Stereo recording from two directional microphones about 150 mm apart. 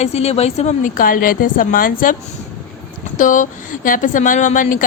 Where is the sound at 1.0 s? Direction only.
70° left (ahead or behind).